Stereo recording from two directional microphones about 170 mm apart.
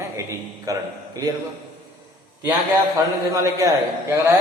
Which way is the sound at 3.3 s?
20° right (ahead or behind).